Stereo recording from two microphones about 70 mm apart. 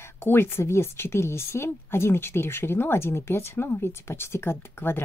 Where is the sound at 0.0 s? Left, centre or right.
Left.